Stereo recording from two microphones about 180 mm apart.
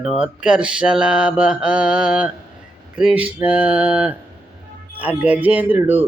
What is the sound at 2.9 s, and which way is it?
Speech, 5° right (ahead or behind).